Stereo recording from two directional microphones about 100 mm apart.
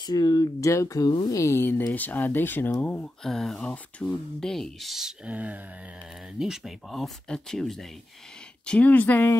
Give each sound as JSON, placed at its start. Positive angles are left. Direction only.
{"t": 0.0, "sound": "speech", "side_deg": 40}
{"t": 3.3, "sound": "speech", "side_deg": 5}
{"t": 5.3, "sound": "speech", "side_deg": -15}
{"t": 6.4, "sound": "speech", "side_deg": -5}
{"t": 8.6, "sound": "speech", "side_deg": 15}